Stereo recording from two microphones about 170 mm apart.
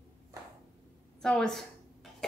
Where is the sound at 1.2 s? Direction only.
5° left (ahead or behind).